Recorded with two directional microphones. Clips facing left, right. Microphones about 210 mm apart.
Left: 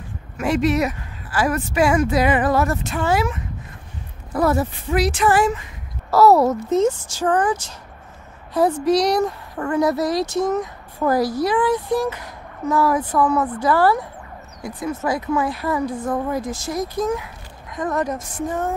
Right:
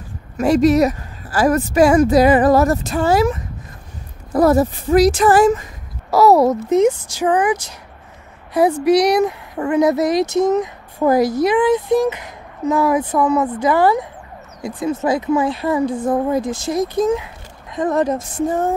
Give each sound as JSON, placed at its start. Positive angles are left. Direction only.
{"t": 0.4, "sound": "speech", "side_deg": -40}
{"t": 6.0, "sound": "speech", "side_deg": -15}
{"t": 8.5, "sound": "speech", "side_deg": -10}